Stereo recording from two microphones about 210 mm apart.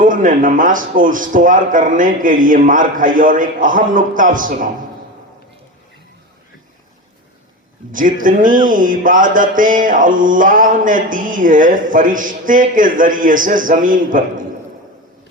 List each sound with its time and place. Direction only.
0.0 s music: 40° right (ahead or behind)
7.9 s music: 40° right (ahead or behind)